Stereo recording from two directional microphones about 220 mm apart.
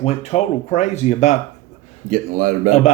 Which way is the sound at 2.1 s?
40° right (ahead or behind).